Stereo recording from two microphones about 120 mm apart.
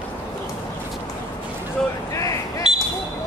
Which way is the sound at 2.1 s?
25° left (ahead or behind).